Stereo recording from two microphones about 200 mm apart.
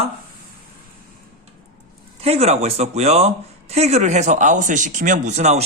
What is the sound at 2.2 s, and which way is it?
Speech, 30° right (ahead or behind).